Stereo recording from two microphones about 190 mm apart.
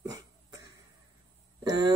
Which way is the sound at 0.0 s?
20° right (ahead or behind).